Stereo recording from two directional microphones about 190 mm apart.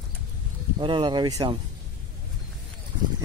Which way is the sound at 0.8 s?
25° right (ahead or behind).